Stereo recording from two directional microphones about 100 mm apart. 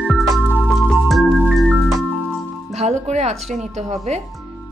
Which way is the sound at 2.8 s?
90° right.